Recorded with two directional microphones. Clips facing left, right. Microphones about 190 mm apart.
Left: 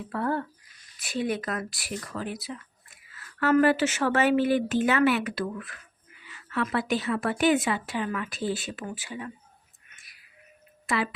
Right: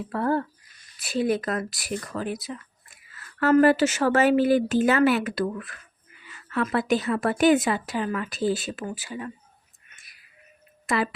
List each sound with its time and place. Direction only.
0.1 s speech: 35° right (ahead or behind)
10.8 s speech: 40° right (ahead or behind)